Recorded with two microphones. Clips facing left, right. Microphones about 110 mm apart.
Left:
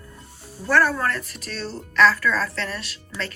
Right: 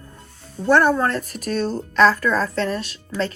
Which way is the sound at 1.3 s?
50° right (ahead or behind).